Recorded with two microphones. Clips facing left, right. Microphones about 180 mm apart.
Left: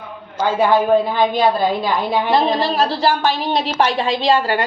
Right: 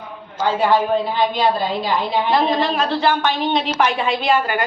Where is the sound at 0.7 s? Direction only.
50° left (ahead or behind).